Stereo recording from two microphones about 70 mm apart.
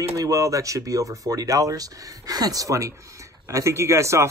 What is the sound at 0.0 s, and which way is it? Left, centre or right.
Speech, right.